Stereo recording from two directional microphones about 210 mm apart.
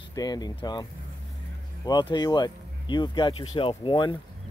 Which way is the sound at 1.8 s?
20° left (ahead or behind).